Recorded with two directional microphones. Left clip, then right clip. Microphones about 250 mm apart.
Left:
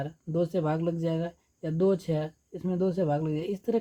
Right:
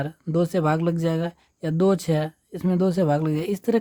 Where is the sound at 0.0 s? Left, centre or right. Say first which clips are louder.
Right 5 dB; right.